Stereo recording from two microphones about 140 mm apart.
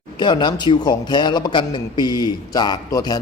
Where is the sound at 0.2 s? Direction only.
35° left (ahead or behind).